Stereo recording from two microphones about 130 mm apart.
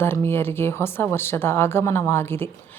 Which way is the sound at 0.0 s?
20° left (ahead or behind).